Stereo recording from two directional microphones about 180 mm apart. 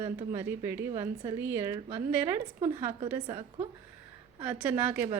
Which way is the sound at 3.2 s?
25° right (ahead or behind).